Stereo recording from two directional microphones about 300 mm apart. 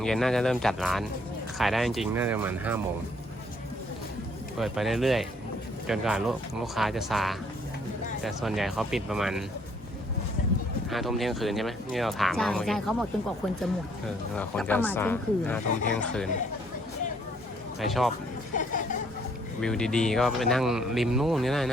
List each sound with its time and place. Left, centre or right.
0.0 s speech: centre
4.5 s speech: centre
10.8 s speech: centre
17.7 s speech: centre
18.5 s a sound: left
19.6 s speech: centre